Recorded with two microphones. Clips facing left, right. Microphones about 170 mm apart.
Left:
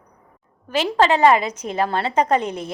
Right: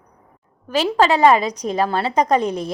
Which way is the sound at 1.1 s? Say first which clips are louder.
Right 1 dB; 15° right (ahead or behind).